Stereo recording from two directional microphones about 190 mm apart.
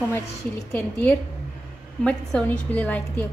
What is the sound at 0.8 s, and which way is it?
A woman's voice, 10° left (ahead or behind).